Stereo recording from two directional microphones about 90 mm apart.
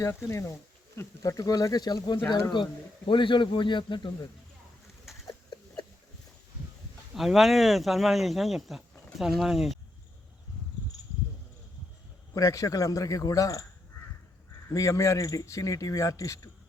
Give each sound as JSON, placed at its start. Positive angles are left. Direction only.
{"t": 0.0, "sound": "a man's voice", "side_deg": 30}
{"t": 5.3, "sound": "a sound", "side_deg": 50}
{"t": 7.1, "sound": "speech", "side_deg": 0}
{"t": 12.3, "sound": "a man's voice", "side_deg": 35}
{"t": 14.7, "sound": "a man's voice", "side_deg": 40}